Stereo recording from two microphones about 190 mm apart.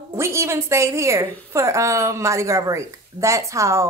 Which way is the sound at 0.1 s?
15° right (ahead or behind).